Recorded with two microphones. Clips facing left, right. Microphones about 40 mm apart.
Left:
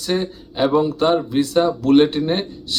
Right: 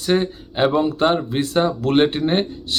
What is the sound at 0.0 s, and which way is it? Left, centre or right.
Speech, right.